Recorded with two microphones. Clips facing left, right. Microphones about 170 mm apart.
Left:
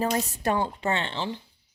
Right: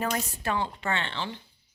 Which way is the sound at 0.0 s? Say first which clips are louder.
Left 4 dB; 40° left (ahead or behind).